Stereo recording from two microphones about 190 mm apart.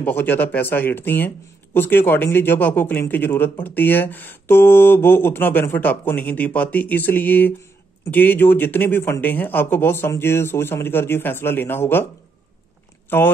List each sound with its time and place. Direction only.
0.0 s speech: 10° left (ahead or behind)
13.1 s speech: 10° left (ahead or behind)